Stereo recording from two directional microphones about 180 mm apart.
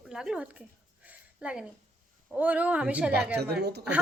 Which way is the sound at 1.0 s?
5° right (ahead or behind).